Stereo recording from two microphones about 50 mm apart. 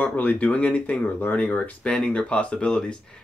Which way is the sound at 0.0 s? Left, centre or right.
Left.